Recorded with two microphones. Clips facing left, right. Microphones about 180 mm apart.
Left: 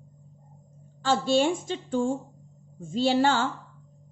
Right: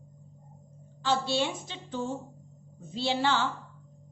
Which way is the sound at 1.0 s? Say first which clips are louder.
Left 6 dB; 45° left (ahead or behind).